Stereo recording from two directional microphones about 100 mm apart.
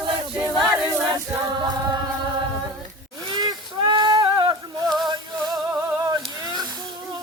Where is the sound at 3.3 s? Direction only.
45° right (ahead or behind).